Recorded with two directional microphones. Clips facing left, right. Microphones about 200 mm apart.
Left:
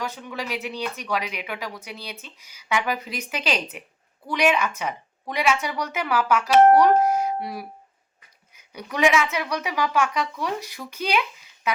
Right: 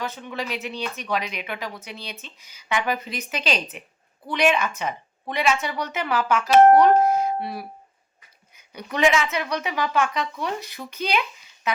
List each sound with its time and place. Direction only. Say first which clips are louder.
0.3 s speech: even; 10° left (ahead or behind)
8.7 s speech: even; 10° left (ahead or behind)